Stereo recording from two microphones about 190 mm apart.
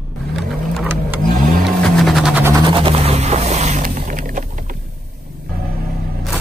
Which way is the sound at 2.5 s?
25° right (ahead or behind).